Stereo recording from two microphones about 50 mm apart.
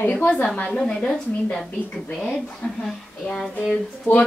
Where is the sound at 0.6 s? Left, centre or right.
Centre.